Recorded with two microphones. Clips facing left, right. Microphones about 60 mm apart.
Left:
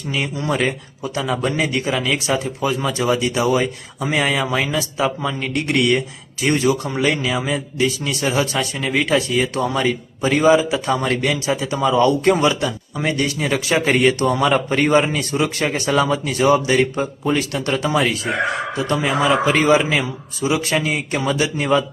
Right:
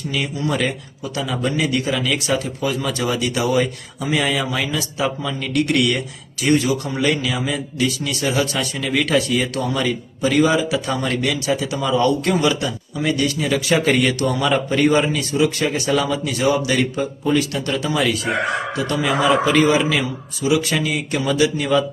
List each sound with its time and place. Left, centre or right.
0.1 s a man's voice: left
2.8 s speech: centre
4.0 s a man's voice: left
8.9 s speech: centre
9.6 s a man's voice: left
13.7 s speech: left
14.3 s a man's voice: left